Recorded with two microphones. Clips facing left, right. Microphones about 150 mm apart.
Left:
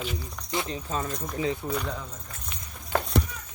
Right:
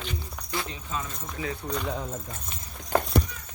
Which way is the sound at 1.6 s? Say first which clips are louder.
Left 1 dB; 5° left (ahead or behind).